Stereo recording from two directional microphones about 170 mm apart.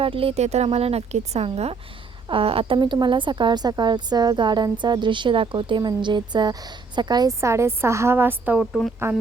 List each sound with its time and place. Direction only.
0.0 s a woman's voice: 35° right (ahead or behind); by 8.9 s 5° right (ahead or behind)